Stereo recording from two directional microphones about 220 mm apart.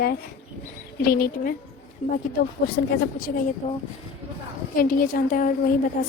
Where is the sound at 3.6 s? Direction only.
30° left (ahead or behind).